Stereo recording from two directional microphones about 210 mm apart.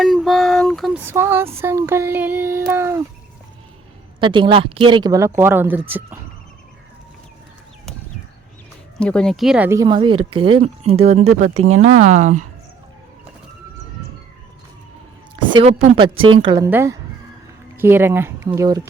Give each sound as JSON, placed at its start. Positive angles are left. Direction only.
{"t": 0.0, "sound": "a sound", "side_deg": 0}
{"t": 1.0, "sound": "child singing", "side_deg": -10}
{"t": 4.2, "sound": "speech", "side_deg": -20}
{"t": 9.0, "sound": "child singing", "side_deg": 5}
{"t": 10.4, "sound": "speech", "side_deg": -25}
{"t": 15.5, "sound": "speech", "side_deg": -25}
{"t": 16.6, "sound": "child singing", "side_deg": -10}